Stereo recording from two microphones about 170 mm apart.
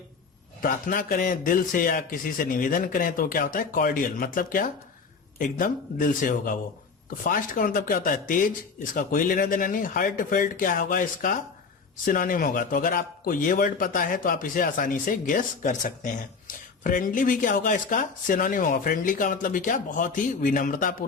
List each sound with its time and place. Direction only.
0.6 s a man's voice: 55° left (ahead or behind)